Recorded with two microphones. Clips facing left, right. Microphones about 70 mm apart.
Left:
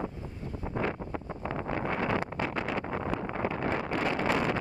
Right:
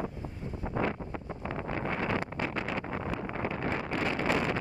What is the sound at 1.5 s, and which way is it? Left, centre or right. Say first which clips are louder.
Wind noise: left 2 dB; left.